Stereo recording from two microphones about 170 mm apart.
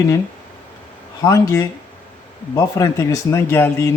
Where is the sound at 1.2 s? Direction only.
20° left (ahead or behind).